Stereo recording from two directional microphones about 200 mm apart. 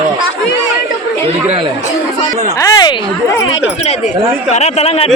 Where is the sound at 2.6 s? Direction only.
15° left (ahead or behind).